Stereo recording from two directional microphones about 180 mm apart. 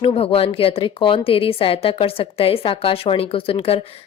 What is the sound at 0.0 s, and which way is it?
A woman's voice, 30° left (ahead or behind).